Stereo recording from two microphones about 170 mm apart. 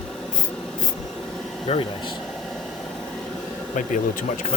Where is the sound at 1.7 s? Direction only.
35° left (ahead or behind).